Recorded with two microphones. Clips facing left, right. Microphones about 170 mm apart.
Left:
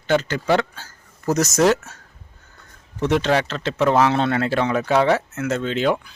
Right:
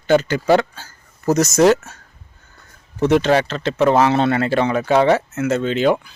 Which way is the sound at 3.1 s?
5° right (ahead or behind).